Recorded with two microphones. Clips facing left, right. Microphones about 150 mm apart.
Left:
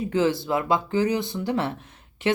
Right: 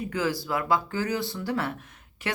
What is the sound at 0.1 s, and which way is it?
A woman's voice, 25° left (ahead or behind).